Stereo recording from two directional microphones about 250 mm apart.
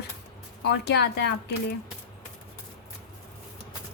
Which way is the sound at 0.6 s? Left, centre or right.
Left.